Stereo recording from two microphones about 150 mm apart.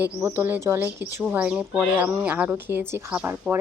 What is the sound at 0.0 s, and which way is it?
Speech, 15° right (ahead or behind).